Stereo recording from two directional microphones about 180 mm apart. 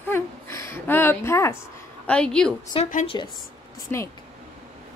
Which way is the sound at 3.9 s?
15° left (ahead or behind).